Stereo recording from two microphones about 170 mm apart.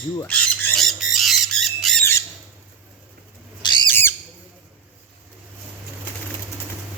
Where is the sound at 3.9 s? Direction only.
15° left (ahead or behind).